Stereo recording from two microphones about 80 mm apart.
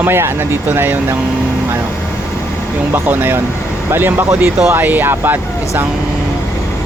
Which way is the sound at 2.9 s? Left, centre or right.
Right.